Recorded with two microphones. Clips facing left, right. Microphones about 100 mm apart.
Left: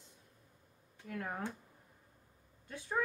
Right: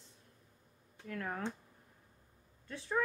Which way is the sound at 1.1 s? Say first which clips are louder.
Right 1 dB; 15° left (ahead or behind).